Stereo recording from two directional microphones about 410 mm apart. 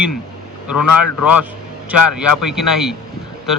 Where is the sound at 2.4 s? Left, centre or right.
Centre.